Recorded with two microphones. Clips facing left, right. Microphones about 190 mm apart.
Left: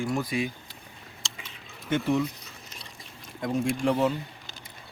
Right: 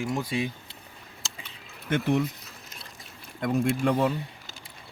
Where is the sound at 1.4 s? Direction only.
60° right (ahead or behind).